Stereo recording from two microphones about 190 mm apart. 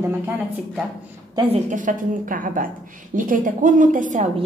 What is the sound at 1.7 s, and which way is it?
A woman's voice, 45° right (ahead or behind).